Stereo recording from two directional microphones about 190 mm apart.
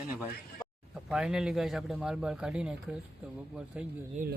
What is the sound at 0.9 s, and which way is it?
A man's voice, 5° right (ahead or behind).